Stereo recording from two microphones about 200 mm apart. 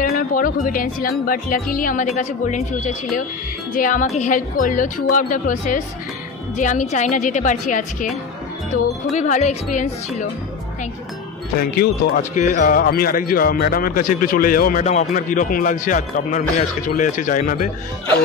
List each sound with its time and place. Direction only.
0.1 s a woman's voice: 45° left (ahead or behind)
11.5 s speech: 50° left (ahead or behind)